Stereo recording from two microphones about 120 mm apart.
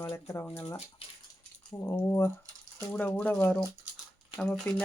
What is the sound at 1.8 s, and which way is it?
Speech, 20° left (ahead or behind).